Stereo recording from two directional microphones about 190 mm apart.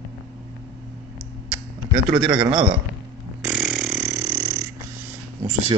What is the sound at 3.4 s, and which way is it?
Burping, centre (ahead or behind).